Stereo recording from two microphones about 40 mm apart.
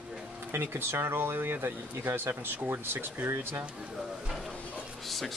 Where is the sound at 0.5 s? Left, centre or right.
Right.